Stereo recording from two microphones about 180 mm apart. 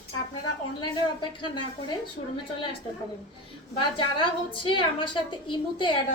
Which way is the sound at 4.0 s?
25° left (ahead or behind).